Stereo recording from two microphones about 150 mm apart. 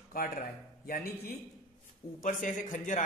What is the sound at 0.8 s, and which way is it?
Speech, 85° left.